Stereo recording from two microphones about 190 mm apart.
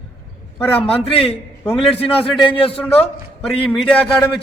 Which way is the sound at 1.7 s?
Centre (ahead or behind).